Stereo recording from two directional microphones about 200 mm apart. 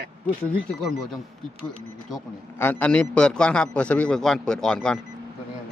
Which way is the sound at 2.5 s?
10° left (ahead or behind).